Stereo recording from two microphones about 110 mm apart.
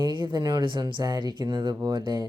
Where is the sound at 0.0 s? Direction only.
45° right (ahead or behind).